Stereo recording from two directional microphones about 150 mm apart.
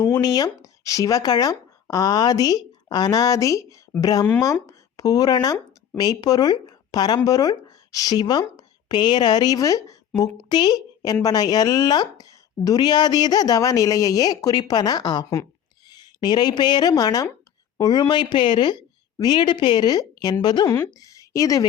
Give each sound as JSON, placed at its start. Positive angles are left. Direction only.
{"t": 0.0, "sound": "a woman's voice", "side_deg": 25}
{"t": 20.7, "sound": "a woman's voice", "side_deg": 15}